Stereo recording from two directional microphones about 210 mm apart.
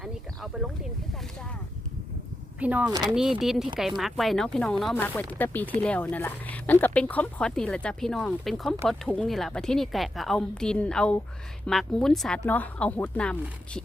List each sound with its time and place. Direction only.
0.0 s a sound: centre (ahead or behind)
2.6 s speech: 5° right (ahead or behind)
2.9 s speech: 20° right (ahead or behind)
3.2 s speech: centre (ahead or behind)